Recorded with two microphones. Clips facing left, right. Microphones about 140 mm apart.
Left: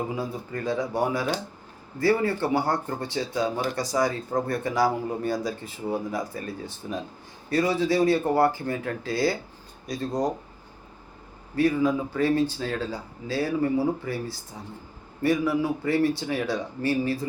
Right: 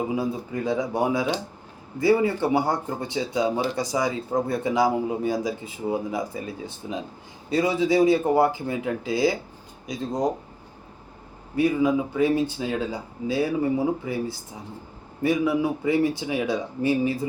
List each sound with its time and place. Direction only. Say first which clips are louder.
0.2 s a man's voice: right 4 dB; 15° right (ahead or behind)
8.1 s speech: right 2 dB; 5° right (ahead or behind)
9.9 s speech: even; centre (ahead or behind)
11.5 s speech: right 1 dB; 15° right (ahead or behind)
15.2 s speech: right 1 dB; 20° right (ahead or behind)